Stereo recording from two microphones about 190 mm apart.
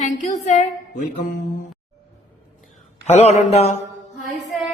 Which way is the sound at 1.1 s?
45° left (ahead or behind).